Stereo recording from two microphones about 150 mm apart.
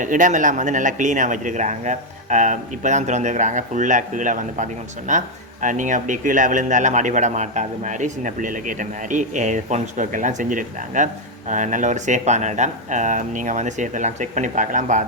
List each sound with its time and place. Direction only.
0.0 s speech: 60° right (ahead or behind)